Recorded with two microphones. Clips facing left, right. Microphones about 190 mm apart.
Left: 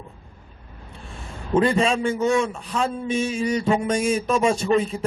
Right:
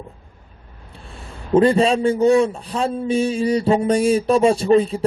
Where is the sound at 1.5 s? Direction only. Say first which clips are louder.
Right 5 dB; 35° right (ahead or behind).